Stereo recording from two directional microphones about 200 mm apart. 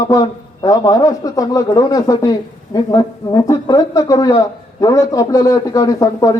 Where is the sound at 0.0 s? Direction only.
20° left (ahead or behind).